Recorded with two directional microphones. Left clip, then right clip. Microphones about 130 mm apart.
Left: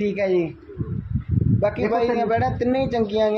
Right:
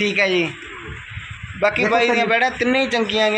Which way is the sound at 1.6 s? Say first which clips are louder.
Right 5 dB; 15° left (ahead or behind).